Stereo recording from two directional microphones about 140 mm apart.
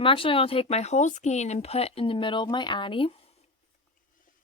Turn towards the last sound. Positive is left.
turn(degrees=40)  # may be behind; listen again after turning